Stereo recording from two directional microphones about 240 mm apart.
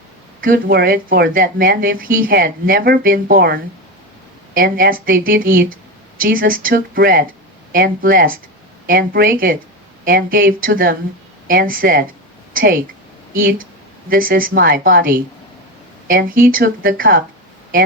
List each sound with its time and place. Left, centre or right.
0.4 s a woman's voice: right